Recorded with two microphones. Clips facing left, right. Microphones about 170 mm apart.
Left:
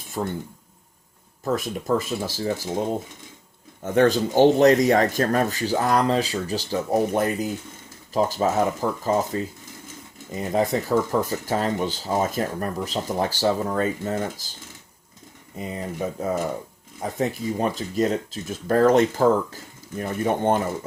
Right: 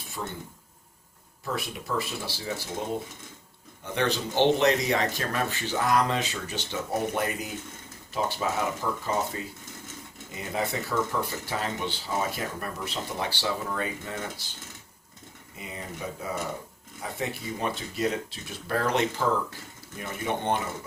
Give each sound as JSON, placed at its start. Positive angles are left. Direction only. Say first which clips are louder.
{"t": 0.2, "sound": "speech", "louder": "left 8 dB", "side_deg": 40}
{"t": 1.5, "sound": "speech", "louder": "left 7 dB", "side_deg": 45}
{"t": 3.8, "sound": "speech", "louder": "left 9 dB", "side_deg": 45}
{"t": 15.5, "sound": "speech", "louder": "left 9 dB", "side_deg": 40}